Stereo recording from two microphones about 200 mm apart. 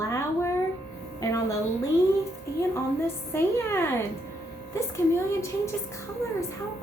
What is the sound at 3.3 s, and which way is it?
Speech, 10° left (ahead or behind).